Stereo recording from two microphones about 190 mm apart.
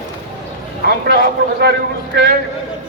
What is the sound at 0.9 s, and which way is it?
Speech, 60° right (ahead or behind).